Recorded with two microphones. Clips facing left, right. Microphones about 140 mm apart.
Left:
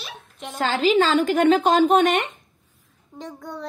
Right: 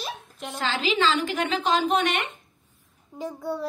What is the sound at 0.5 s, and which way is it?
A woman's voice, 45° left (ahead or behind).